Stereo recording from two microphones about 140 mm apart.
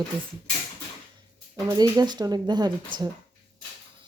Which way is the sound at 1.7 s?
30° right (ahead or behind).